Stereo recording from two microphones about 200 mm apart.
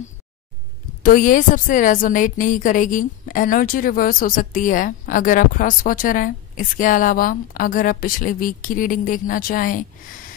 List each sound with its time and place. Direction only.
1.0 s a woman's voice: 45° left (ahead or behind)